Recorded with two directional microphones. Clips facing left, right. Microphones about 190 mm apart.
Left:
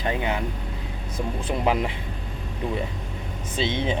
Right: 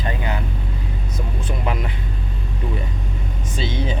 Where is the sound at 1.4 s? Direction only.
25° left (ahead or behind).